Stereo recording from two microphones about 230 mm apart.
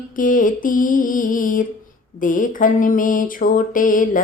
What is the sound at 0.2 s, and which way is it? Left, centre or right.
Mantra, left.